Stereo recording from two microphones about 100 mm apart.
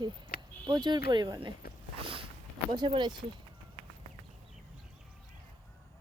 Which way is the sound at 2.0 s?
60° right (ahead or behind).